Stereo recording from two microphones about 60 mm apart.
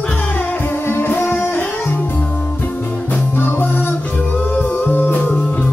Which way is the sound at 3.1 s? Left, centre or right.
Left.